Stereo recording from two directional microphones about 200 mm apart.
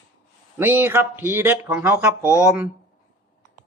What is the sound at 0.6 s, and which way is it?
Speech, 10° right (ahead or behind).